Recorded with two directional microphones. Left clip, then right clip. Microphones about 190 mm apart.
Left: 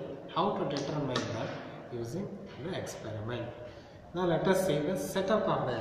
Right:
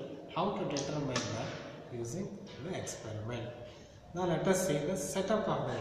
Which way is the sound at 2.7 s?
Centre (ahead or behind).